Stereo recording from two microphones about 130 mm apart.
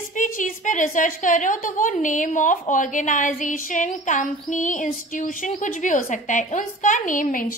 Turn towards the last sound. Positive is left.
turn(degrees=90)